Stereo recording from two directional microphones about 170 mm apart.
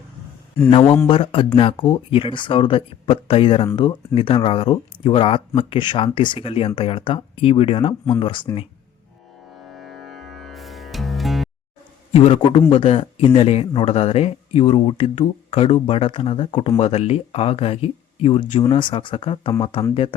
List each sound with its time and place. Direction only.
0.7 s a man's voice: 30° left (ahead or behind)
9.7 s music: centre (ahead or behind)
12.1 s a man's voice: 35° left (ahead or behind)